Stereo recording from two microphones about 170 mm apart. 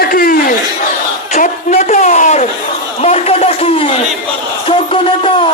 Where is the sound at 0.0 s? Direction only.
55° left (ahead or behind); by 5.5 s 30° left (ahead or behind).